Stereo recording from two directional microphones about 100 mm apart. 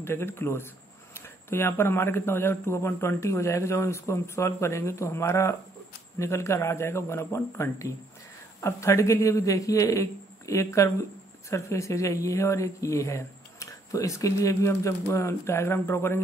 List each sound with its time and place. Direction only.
0.0 s speech: 25° left (ahead or behind)